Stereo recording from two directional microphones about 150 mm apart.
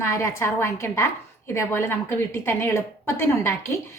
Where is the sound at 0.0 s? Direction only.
20° left (ahead or behind).